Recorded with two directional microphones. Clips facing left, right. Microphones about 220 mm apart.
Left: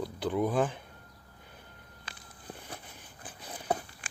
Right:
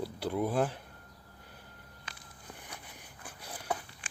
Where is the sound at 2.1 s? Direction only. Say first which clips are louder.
Left 1 dB; 35° left (ahead or behind).